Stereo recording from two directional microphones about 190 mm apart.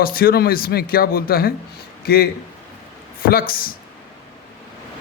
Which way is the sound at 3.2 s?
50° left (ahead or behind).